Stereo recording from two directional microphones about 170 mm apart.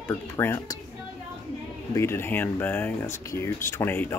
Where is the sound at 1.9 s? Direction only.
15° left (ahead or behind).